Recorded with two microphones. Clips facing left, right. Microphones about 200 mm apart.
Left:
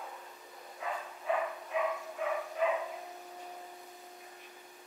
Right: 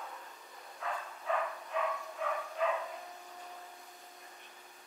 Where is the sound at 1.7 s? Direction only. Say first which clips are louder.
Left 2 dB; 5° left (ahead or behind).